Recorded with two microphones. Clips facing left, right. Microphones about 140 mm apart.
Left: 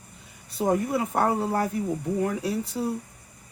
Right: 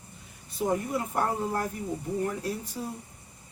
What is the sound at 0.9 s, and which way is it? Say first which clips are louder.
Speech: left 5 dB; 85° left.